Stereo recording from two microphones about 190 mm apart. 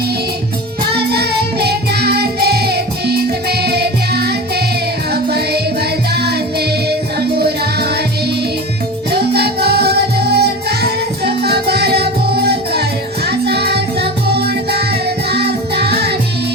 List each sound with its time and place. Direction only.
0.9 s music: 60° right (ahead or behind)
6.1 s music: 60° right (ahead or behind)
9.1 s music: 55° right (ahead or behind)